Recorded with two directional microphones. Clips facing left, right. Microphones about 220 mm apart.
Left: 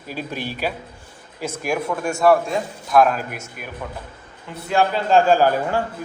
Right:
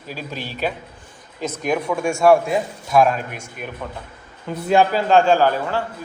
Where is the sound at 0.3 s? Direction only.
10° left (ahead or behind).